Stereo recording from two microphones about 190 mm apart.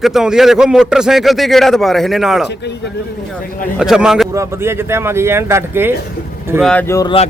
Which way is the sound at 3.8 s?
5° right (ahead or behind).